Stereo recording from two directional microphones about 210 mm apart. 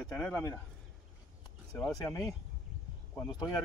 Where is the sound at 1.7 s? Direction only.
10° left (ahead or behind).